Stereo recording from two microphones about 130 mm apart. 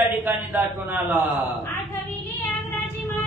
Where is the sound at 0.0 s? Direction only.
15° right (ahead or behind).